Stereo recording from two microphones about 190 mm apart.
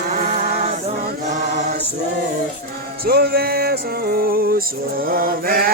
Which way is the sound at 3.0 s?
55° right (ahead or behind).